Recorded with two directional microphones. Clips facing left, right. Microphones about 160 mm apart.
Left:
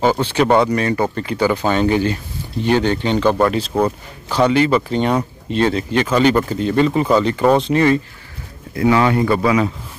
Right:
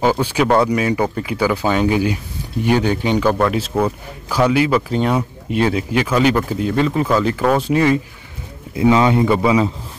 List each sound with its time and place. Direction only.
0.0 s speech: 10° right (ahead or behind)
8.7 s speech: 20° right (ahead or behind)